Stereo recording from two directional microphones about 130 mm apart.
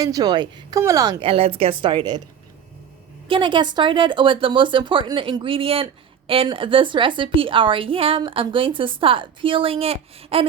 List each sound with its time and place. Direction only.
0.0 s a woman's voice: 30° right (ahead or behind)
1.2 s a woman's voice: 45° right (ahead or behind)
3.2 s speech: 40° right (ahead or behind)